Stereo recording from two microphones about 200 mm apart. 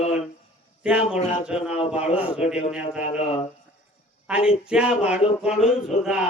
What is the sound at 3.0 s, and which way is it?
Speech, 35° left (ahead or behind).